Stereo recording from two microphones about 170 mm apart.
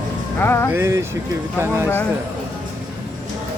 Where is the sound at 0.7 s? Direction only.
15° right (ahead or behind).